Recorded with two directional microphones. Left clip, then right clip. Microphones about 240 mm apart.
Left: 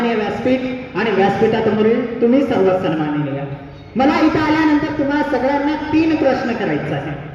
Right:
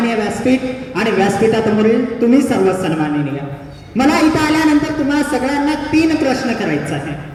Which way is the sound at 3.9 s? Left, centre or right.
Right.